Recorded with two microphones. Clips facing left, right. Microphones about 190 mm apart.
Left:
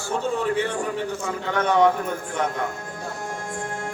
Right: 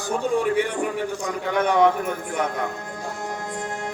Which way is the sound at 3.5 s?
20° right (ahead or behind).